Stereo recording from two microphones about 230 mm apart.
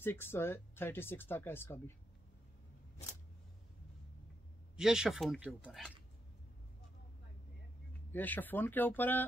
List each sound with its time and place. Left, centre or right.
0.0 s speech: centre
4.7 s speech: centre
8.1 s speech: centre